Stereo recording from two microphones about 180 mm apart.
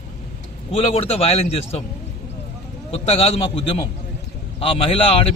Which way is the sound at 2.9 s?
35° left (ahead or behind).